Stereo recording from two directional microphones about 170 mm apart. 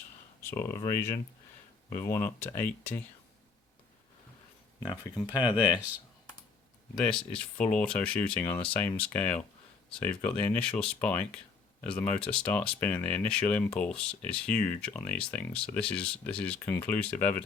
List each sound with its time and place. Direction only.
0.5 s speech: 15° left (ahead or behind)
5.2 s speech: 25° left (ahead or behind)
6.9 s speech: 5° left (ahead or behind)